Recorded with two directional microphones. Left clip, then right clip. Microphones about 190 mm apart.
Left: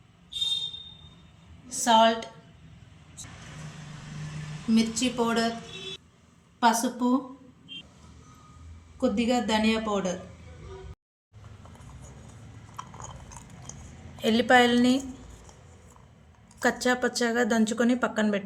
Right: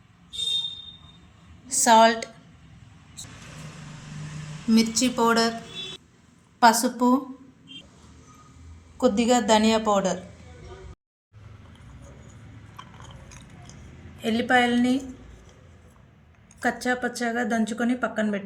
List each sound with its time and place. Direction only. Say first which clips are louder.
1.7 s a woman's voice: right 4 dB; 30° right (ahead or behind)
4.7 s a woman's voice: right 4 dB; 30° right (ahead or behind)
6.6 s a woman's voice: right 5 dB; 25° right (ahead or behind)
9.0 s a woman's voice: right 5 dB; 25° right (ahead or behind)
14.2 s a woman's voice: left 1 dB; 35° left (ahead or behind)
16.6 s a woman's voice: left 1 dB; 35° left (ahead or behind)